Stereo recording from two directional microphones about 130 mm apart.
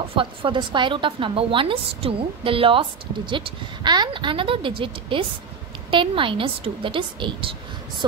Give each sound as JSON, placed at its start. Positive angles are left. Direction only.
{"t": 0.1, "sound": "a woman's voice", "side_deg": -40}